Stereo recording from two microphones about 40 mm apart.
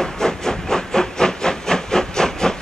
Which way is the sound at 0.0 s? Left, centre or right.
Centre.